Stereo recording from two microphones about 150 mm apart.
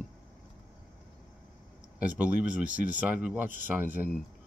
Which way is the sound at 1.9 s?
10° right (ahead or behind).